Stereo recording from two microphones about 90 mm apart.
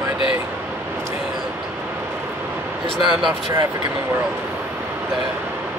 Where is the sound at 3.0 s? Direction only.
60° right (ahead or behind).